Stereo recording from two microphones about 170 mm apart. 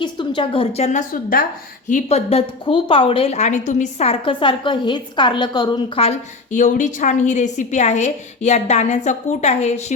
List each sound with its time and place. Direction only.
0.0 s a woman's voice: 30° left (ahead or behind)
6.1 s a woman's voice: 45° left (ahead or behind)